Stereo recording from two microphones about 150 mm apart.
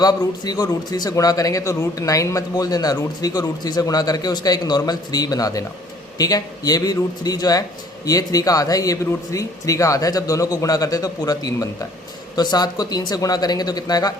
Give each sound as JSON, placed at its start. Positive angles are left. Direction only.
{"t": 0.0, "sound": "a man's voice", "side_deg": 25}